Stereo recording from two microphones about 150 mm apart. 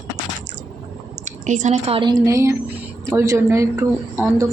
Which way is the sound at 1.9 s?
35° right (ahead or behind).